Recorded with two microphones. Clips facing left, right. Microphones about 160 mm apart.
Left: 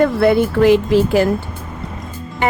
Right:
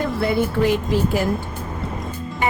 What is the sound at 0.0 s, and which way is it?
Speech, 75° left (ahead or behind).